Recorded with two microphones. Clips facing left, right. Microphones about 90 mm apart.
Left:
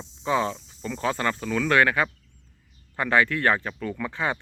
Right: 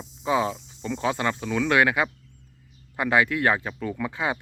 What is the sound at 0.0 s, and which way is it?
Speech, 10° right (ahead or behind).